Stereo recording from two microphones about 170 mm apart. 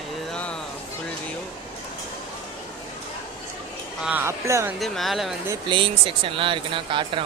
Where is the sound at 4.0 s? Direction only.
10° right (ahead or behind).